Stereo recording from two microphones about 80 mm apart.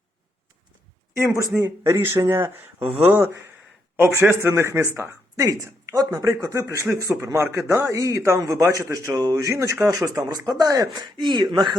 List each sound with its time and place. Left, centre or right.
1.8 s a man's voice: right
2.8 s speech: centre
3.1 s a man's voice: right
10.0 s speech: right